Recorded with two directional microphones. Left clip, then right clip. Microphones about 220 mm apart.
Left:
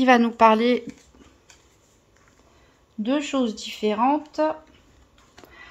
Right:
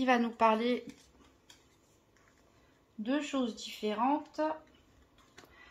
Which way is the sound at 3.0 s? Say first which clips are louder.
Left 10 dB; 40° left (ahead or behind).